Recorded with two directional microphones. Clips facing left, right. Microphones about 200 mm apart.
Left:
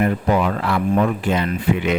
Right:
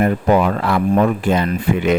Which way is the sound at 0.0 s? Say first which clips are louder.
Right 3 dB; 50° right (ahead or behind).